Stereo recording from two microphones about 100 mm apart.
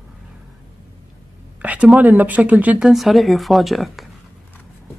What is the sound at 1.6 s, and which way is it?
Speech, 15° right (ahead or behind).